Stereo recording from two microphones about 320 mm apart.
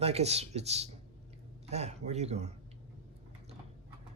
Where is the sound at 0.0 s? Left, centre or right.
Centre.